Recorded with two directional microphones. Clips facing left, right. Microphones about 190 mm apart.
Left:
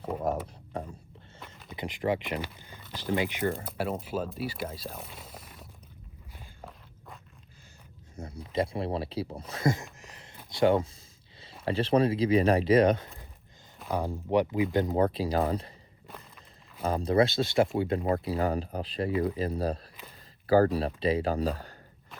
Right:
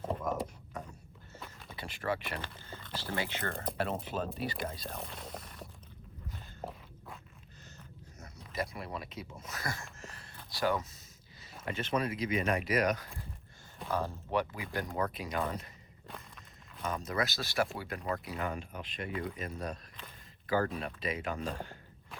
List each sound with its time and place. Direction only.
0.3 s a sound: 30° left (ahead or behind)
1.7 s speech: 15° left (ahead or behind)
3.5 s speech: 5° left (ahead or behind)
8.2 s speech: 30° left (ahead or behind)
13.9 s speech: 15° left (ahead or behind); by 15.7 s 30° left (ahead or behind)
16.0 s walk: 5° left (ahead or behind)
16.8 s speech: 30° left (ahead or behind)